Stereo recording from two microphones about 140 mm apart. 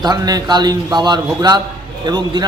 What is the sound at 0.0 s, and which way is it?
A man's voice, 30° right (ahead or behind).